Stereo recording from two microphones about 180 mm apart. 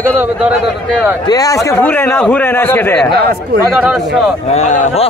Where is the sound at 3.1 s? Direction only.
60° right (ahead or behind).